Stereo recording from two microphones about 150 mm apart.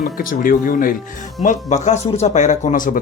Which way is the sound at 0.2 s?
65° left (ahead or behind).